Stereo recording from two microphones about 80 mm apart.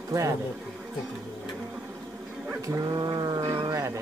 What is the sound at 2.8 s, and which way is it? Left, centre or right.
Sheep, right.